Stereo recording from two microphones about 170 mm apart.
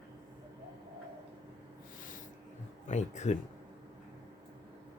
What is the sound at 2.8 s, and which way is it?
Speech, 45° left (ahead or behind).